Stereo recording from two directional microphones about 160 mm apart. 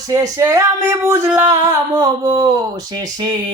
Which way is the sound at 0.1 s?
20° right (ahead or behind).